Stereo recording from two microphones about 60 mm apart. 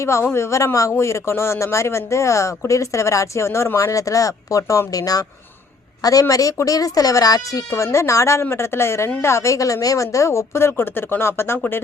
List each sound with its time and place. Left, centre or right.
0.0 s speech: left
4.9 s a woman's voice: left
7.9 s speech: left